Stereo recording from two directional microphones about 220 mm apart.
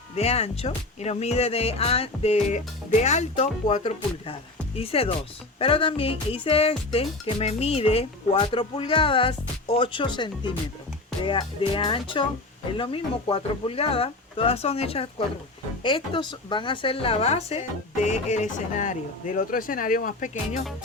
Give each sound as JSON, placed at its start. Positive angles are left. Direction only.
{"t": 0.2, "sound": "a woman's voice", "side_deg": 30}